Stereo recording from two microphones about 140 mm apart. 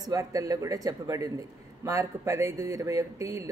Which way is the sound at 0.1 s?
25° right (ahead or behind).